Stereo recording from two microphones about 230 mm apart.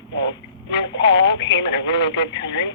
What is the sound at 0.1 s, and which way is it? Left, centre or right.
Speech, left.